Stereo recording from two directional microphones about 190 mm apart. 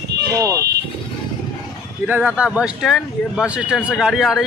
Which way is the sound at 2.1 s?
5° right (ahead or behind).